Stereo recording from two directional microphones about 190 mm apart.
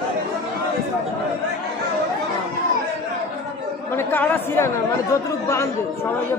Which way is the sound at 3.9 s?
10° left (ahead or behind).